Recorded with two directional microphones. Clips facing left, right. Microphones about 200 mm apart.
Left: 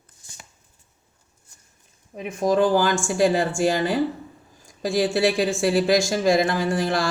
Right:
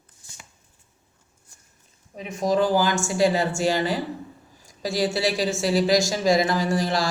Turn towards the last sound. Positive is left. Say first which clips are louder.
# left 1 dB
turn(degrees=55)  # may be behind; listen again after turning